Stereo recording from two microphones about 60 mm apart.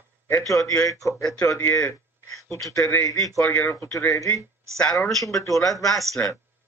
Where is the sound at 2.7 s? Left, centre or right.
Left.